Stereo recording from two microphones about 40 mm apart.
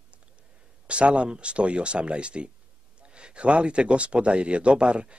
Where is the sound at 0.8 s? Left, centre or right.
Right.